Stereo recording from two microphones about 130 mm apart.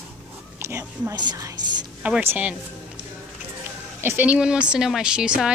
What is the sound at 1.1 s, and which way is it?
Speech, 30° right (ahead or behind).